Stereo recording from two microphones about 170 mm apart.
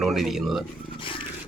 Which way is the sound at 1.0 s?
30° left (ahead or behind).